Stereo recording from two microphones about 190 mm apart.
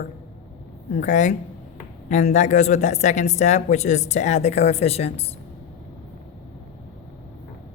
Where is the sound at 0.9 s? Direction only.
40° left (ahead or behind).